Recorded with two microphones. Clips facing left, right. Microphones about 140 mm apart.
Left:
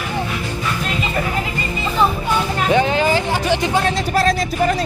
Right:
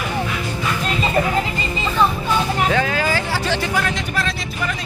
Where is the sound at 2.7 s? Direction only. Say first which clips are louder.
Left 4 dB; 20° left (ahead or behind).